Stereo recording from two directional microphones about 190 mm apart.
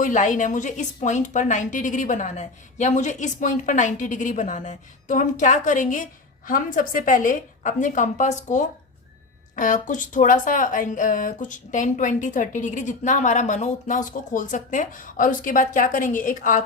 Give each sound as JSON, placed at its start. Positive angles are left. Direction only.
{"t": 0.0, "sound": "a woman's voice", "side_deg": 40}